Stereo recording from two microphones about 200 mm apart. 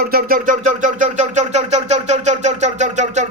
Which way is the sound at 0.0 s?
50° right (ahead or behind).